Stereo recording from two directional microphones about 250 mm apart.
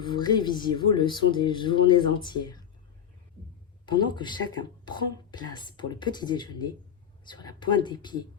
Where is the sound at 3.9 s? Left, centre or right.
Centre.